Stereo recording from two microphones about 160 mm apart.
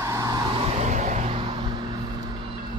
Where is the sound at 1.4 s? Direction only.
30° right (ahead or behind).